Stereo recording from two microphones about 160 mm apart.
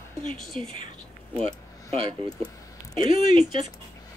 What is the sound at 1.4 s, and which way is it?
Speech, 40° right (ahead or behind).